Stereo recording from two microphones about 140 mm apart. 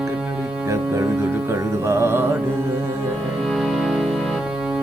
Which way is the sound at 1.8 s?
20° right (ahead or behind).